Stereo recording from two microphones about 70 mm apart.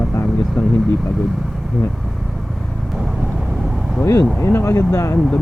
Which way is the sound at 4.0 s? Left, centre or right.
Left.